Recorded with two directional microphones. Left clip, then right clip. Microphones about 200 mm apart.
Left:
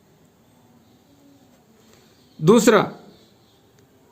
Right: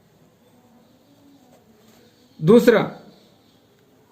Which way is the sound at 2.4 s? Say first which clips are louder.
Right 1 dB; 50° left (ahead or behind).